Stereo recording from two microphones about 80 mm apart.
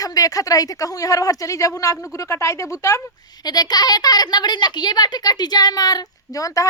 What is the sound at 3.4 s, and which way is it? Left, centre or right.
Speech, left.